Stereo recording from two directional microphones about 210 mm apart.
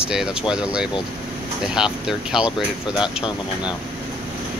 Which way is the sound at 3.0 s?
20° left (ahead or behind).